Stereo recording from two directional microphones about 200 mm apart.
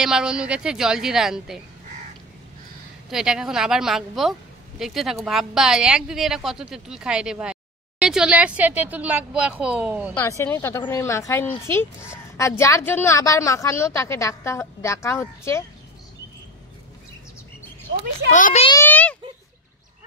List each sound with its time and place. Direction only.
0.0 s a woman's voice: 5° right (ahead or behind)
3.1 s a woman's voice: 5° right (ahead or behind)
10.1 s a woman's voice: 15° left (ahead or behind)
18.3 s a child's voice: 35° left (ahead or behind)
18.7 s a woman's voice: 10° left (ahead or behind)